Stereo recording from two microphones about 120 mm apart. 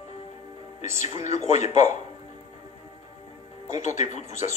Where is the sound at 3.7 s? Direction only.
75° left (ahead or behind).